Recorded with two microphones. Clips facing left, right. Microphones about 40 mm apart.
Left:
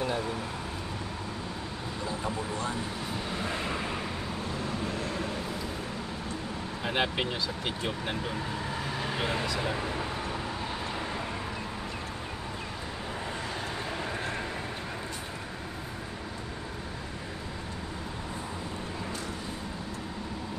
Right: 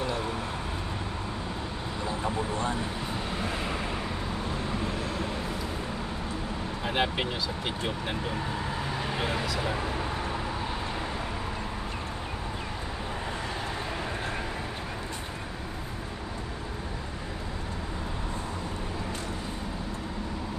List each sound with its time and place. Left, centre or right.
2.0 s vehicle: right
3.3 s vehicle: centre
6.8 s speech: centre
13.8 s vehicle: centre